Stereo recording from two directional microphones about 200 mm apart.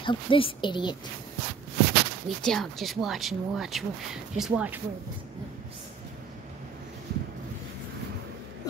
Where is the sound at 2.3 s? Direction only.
Centre (ahead or behind).